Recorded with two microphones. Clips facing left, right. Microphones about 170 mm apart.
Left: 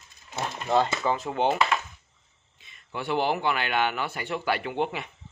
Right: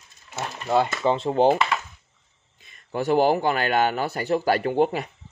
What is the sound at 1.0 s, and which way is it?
Speech, 30° right (ahead or behind).